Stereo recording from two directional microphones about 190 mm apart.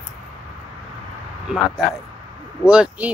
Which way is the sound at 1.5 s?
5° right (ahead or behind).